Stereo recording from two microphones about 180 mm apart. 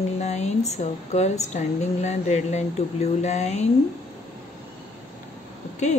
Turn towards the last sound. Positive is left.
turn(degrees=40)  # may be behind; listen again after turning